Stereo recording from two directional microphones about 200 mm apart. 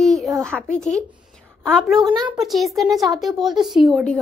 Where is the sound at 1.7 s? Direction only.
Centre (ahead or behind).